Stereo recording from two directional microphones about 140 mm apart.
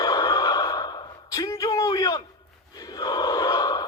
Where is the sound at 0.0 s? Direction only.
25° left (ahead or behind).